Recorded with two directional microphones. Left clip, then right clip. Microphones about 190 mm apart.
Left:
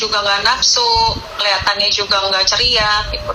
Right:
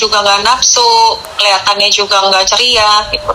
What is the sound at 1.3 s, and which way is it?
Speech, 10° right (ahead or behind).